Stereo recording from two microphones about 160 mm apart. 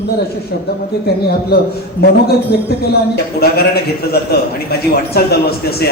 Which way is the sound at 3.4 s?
75° left (ahead or behind).